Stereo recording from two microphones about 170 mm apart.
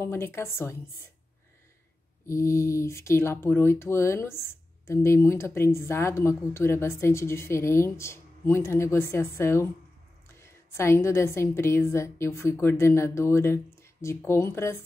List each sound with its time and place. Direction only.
0.0 s speech: 15° left (ahead or behind)
2.2 s speech: 15° left (ahead or behind)